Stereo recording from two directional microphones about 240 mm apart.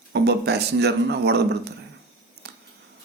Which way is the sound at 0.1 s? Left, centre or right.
Right.